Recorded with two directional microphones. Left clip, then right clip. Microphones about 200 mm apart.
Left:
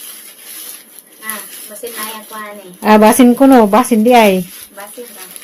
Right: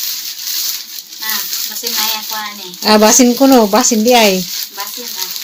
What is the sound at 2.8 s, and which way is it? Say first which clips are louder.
Speech: left 1 dB; 20° left (ahead or behind).